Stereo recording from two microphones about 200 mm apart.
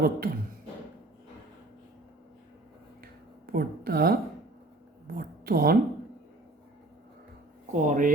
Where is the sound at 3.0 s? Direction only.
45° right (ahead or behind).